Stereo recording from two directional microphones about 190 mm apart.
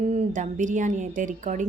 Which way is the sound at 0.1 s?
40° right (ahead or behind).